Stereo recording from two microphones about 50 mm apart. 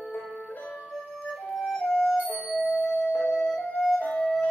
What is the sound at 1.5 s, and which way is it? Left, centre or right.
Music, centre.